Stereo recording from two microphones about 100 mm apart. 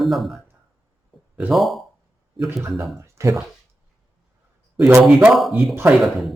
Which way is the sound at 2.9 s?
30° right (ahead or behind).